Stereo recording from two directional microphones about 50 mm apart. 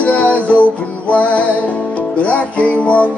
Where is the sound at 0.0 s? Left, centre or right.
Left.